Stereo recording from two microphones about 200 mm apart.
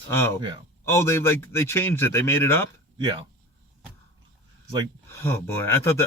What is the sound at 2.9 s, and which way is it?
Speech, 25° right (ahead or behind).